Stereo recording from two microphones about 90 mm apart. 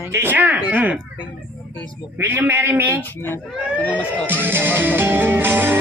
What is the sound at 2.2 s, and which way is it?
Music, 25° right (ahead or behind).